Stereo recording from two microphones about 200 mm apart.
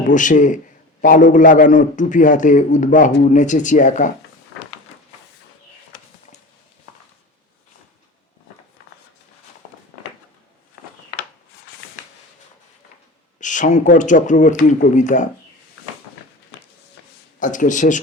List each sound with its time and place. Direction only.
0.1 s a man's voice: 40° left (ahead or behind)
13.4 s a man's voice: 40° left (ahead or behind)
17.4 s a man's voice: 40° left (ahead or behind)